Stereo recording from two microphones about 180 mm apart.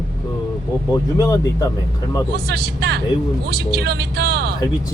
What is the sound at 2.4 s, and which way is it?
Speech, 65° right (ahead or behind).